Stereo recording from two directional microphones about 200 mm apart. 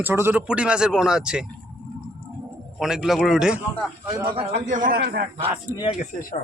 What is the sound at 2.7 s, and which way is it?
A man's voice, centre (ahead or behind).